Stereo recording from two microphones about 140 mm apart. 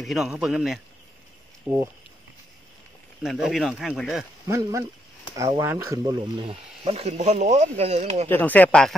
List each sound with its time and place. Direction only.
0.0 s speech: centre (ahead or behind)
1.7 s speech: 15° right (ahead or behind)
3.2 s speech: 5° right (ahead or behind)
4.5 s speech: 25° right (ahead or behind)
6.0 s speech: 35° right (ahead or behind); by 8.3 s 50° right (ahead or behind)
8.3 s speech: 10° left (ahead or behind)